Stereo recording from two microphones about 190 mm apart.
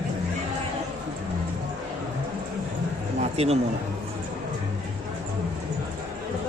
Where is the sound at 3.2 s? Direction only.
35° right (ahead or behind).